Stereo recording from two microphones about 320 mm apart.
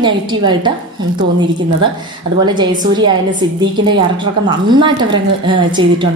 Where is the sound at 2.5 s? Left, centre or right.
Centre.